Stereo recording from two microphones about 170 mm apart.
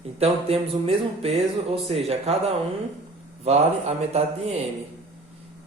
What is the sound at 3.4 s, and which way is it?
Speech, 40° right (ahead or behind).